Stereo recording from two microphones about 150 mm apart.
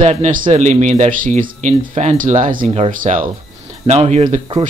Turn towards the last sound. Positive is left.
turn(degrees=-45)  # may be behind; listen again after turning